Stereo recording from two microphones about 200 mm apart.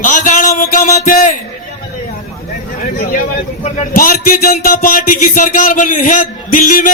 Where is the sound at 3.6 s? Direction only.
45° left (ahead or behind).